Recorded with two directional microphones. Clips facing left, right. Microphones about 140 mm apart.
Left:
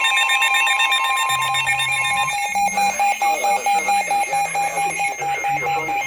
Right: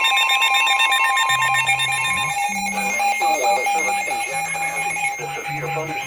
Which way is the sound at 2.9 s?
15° left (ahead or behind).